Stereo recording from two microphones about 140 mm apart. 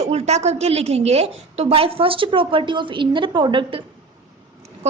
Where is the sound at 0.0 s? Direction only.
50° right (ahead or behind).